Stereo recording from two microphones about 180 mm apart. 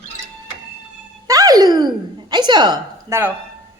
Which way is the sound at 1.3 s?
20° right (ahead or behind).